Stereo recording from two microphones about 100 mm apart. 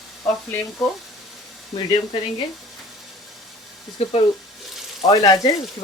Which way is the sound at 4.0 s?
90° left.